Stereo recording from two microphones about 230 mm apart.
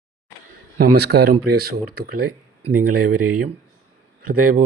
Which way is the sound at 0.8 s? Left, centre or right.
Right.